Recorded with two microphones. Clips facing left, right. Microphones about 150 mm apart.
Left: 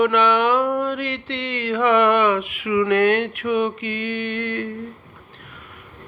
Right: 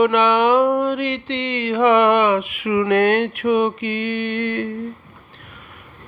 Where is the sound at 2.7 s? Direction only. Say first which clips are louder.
Right 1 dB; 25° right (ahead or behind).